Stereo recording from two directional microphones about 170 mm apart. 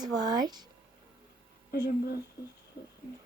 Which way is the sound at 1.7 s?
75° left (ahead or behind).